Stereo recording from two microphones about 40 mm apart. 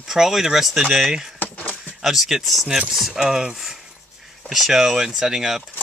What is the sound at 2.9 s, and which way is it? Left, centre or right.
Speech, centre.